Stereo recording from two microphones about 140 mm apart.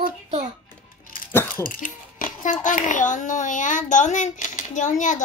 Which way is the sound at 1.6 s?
80° left.